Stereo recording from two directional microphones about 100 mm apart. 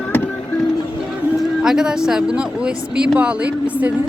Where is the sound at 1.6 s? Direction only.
5° right (ahead or behind).